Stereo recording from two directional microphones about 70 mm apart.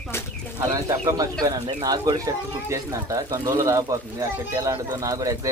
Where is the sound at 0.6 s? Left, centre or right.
Right.